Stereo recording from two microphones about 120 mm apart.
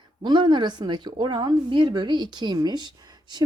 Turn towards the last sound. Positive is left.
turn(degrees=-35)  # may be behind; listen again after turning